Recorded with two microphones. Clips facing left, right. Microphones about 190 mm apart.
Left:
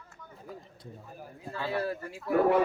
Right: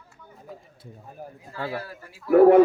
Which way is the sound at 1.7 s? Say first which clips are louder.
Left 3 dB; 25° left (ahead or behind).